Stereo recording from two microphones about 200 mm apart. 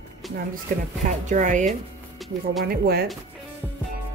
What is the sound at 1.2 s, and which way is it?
Speech, 40° right (ahead or behind).